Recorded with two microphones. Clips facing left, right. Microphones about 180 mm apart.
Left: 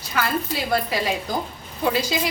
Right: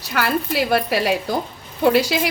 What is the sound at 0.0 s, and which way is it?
A woman's voice, 70° right (ahead or behind).